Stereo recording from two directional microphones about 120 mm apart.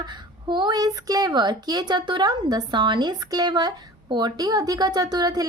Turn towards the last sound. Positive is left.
turn(degrees=-35)  # may be behind; listen again after turning